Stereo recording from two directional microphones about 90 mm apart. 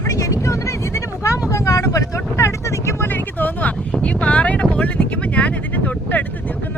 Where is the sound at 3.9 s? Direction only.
15° left (ahead or behind).